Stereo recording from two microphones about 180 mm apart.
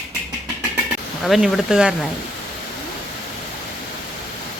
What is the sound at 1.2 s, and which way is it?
Speech, centre (ahead or behind).